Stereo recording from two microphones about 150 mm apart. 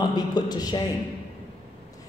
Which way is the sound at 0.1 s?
25° left (ahead or behind).